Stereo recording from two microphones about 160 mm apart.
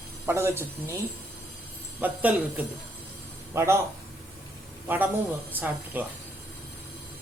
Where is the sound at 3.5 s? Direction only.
15° right (ahead or behind).